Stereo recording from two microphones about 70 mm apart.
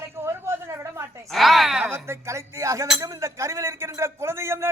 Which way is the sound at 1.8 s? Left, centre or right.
Right.